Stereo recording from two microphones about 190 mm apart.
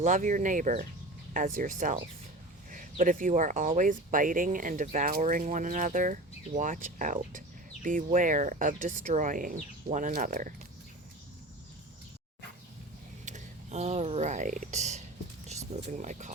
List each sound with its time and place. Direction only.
0.0 s speech: 40° right (ahead or behind)
13.2 s speech: 40° right (ahead or behind)